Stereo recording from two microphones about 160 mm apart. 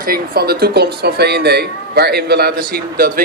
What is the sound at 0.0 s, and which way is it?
Speech, 70° right (ahead or behind).